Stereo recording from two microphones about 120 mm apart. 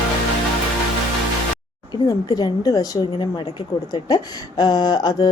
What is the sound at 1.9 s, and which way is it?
Speech, 30° left (ahead or behind).